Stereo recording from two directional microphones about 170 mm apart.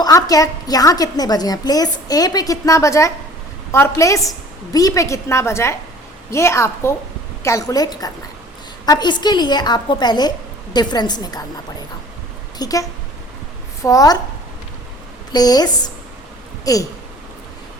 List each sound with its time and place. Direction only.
0.0 s a woman's voice: 20° left (ahead or behind)
12.5 s a woman's voice: 20° left (ahead or behind)
15.3 s a woman's voice: 25° left (ahead or behind)